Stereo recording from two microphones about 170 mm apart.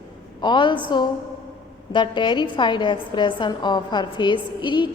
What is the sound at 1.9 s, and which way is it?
A woman's voice, 30° left (ahead or behind).